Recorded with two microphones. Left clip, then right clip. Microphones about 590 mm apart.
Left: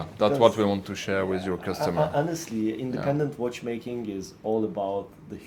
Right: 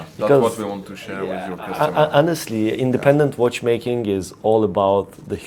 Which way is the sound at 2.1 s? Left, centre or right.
Right.